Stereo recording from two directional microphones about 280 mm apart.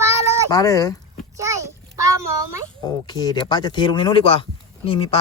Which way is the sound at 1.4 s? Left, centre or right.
Centre.